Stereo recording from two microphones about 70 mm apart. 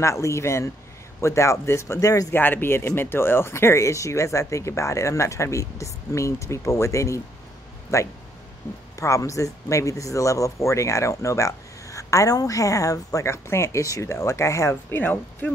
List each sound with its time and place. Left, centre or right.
0.0 s speech: left
2.3 s speech: left